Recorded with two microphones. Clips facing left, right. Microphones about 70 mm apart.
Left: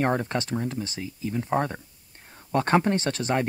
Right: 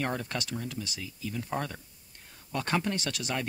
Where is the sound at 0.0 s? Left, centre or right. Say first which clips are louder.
Left 8 dB; left.